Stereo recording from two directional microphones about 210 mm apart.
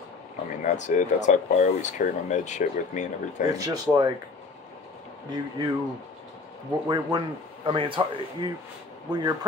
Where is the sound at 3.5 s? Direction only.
15° right (ahead or behind).